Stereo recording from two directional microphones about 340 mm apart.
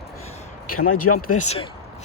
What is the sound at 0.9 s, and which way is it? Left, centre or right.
Speech, left.